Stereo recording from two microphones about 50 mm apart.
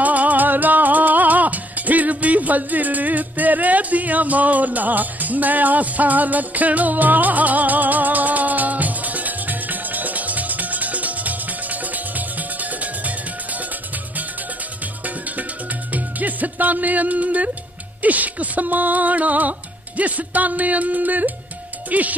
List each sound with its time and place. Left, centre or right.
0.0 s music: right
15.0 s music: right
18.0 s a sound: right
21.9 s speech: right